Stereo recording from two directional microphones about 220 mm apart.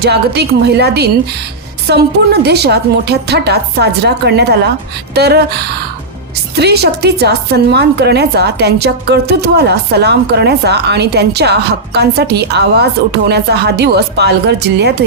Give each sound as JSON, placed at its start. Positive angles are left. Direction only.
{"t": 0.0, "sound": "a woman's voice", "side_deg": -50}